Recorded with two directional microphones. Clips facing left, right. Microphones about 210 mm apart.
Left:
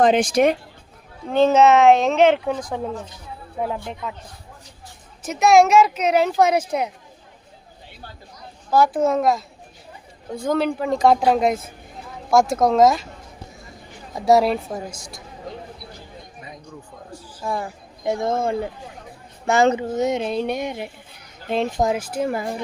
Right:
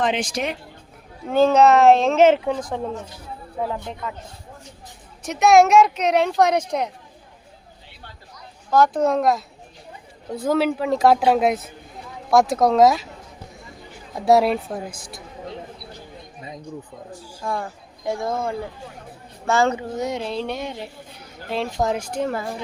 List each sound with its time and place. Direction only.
0.0 s speech: 50° left (ahead or behind)
1.3 s speech: centre (ahead or behind)
5.2 s speech: centre (ahead or behind)
8.7 s speech: 5° left (ahead or behind)
14.3 s speech: centre (ahead or behind)
14.8 s speech: 55° right (ahead or behind)
17.1 s speech: 10° right (ahead or behind)
17.4 s speech: 5° left (ahead or behind)
18.0 s speech: 20° left (ahead or behind)
19.5 s a sound: 20° left (ahead or behind)
21.5 s speech: 20° left (ahead or behind)
22.1 s a sound: 10° left (ahead or behind)